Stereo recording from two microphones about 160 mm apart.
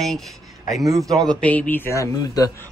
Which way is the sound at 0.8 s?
20° right (ahead or behind).